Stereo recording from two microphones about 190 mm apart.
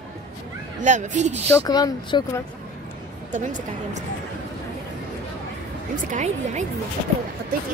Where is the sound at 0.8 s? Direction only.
40° right (ahead or behind).